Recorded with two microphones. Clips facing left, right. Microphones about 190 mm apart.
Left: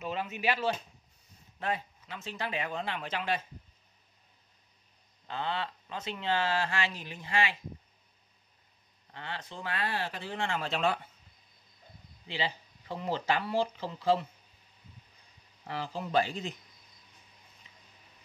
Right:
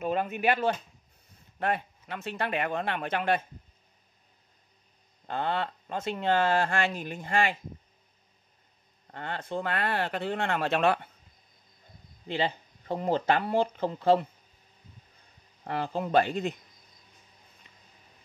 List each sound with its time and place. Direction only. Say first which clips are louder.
0.0 s speech: right 6 dB; 50° right (ahead or behind)
5.3 s speech: right 5 dB; 50° right (ahead or behind)
9.1 s speech: right 8 dB; 50° right (ahead or behind)
12.3 s speech: right 6 dB; 50° right (ahead or behind)
15.6 s speech: right 6 dB; 55° right (ahead or behind)